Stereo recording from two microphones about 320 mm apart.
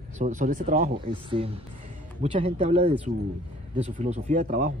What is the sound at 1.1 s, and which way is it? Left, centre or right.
Speech, centre.